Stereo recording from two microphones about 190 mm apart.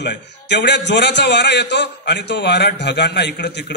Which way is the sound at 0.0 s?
65° left (ahead or behind).